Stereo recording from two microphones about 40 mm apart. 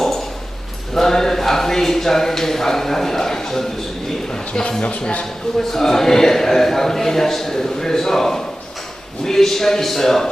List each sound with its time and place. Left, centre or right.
0.9 s speech: centre
4.3 s a sound: left
4.8 s speech: left
5.5 s a man's voice: centre